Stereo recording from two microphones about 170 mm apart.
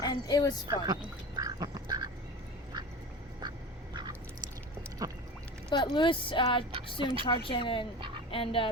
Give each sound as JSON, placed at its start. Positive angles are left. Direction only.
{"t": 0.0, "sound": "speech", "side_deg": 25}
{"t": 0.7, "sound": "duck", "side_deg": -25}
{"t": 5.0, "sound": "duck", "side_deg": -20}
{"t": 5.7, "sound": "speech", "side_deg": 25}
{"t": 7.0, "sound": "speech", "side_deg": -30}
{"t": 7.3, "sound": "speech", "side_deg": 30}